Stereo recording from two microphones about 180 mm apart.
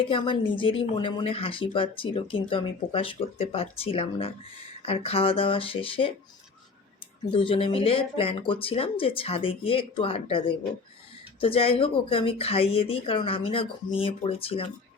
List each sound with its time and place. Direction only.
0.0 s speech: 30° left (ahead or behind)
7.3 s speech: 30° left (ahead or behind)